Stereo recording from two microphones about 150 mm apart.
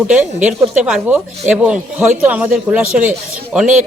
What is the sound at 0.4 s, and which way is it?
Speech, 5° right (ahead or behind).